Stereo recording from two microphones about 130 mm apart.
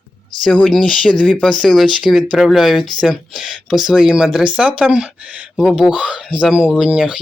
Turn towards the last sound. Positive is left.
turn(degrees=-5)  # may be behind; listen again after turning